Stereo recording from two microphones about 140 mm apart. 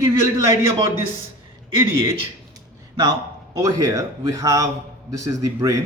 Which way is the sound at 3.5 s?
25° right (ahead or behind).